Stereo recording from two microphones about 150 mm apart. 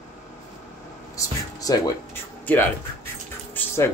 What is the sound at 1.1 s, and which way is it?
Speech, 25° left (ahead or behind).